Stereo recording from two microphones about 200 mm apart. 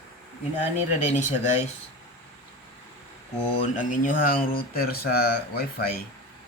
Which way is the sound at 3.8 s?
45° left (ahead or behind).